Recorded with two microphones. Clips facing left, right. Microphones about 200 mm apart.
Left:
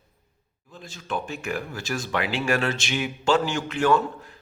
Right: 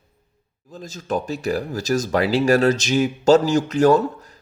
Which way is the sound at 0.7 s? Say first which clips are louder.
Right 6 dB; 40° right (ahead or behind).